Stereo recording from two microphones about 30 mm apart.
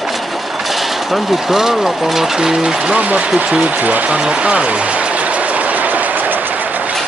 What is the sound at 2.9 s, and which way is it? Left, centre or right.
Speech, right.